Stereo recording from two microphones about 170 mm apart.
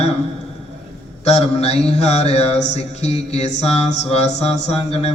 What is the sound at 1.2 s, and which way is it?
Speech, 40° left (ahead or behind).